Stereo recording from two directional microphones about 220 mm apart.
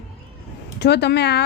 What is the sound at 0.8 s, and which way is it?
Speech, 50° left (ahead or behind).